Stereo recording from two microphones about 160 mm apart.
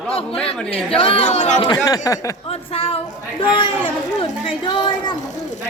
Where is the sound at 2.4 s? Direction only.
35° left (ahead or behind).